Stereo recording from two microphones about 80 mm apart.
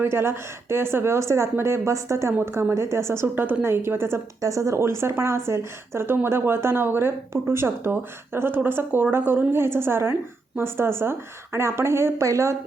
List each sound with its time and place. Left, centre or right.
0.0 s speech: right
4.4 s speech: right